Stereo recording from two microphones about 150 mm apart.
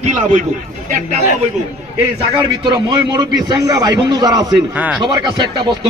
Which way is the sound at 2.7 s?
25° right (ahead or behind).